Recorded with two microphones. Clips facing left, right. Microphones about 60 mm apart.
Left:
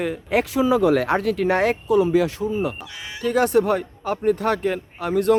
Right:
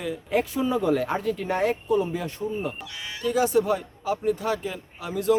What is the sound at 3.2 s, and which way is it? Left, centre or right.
Speech, left.